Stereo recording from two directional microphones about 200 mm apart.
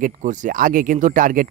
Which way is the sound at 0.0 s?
40° right (ahead or behind).